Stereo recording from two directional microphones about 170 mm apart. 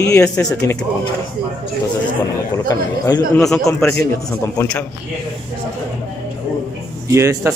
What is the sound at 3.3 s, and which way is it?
Speech, 5° left (ahead or behind).